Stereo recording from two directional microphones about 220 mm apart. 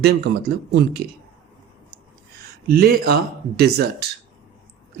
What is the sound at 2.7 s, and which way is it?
Speech, 45° right (ahead or behind).